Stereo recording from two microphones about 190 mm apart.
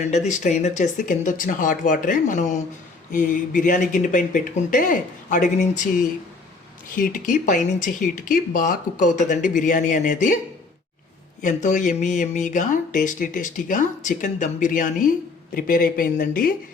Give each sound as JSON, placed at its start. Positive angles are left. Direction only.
{"t": 0.0, "sound": "speech", "side_deg": 35}
{"t": 11.4, "sound": "speech", "side_deg": 40}